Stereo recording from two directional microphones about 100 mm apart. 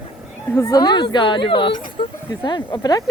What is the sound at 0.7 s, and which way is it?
Speech, 45° left (ahead or behind).